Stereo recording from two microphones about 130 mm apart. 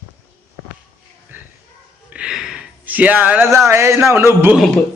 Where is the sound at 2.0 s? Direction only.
5° right (ahead or behind).